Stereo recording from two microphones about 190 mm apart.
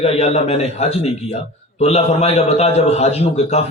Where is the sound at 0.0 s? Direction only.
30° left (ahead or behind).